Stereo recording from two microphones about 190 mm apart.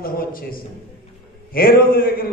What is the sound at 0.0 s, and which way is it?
A man's voice, 50° left (ahead or behind).